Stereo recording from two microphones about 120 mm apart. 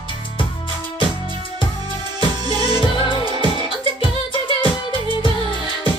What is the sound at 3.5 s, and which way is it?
Music, 45° left (ahead or behind).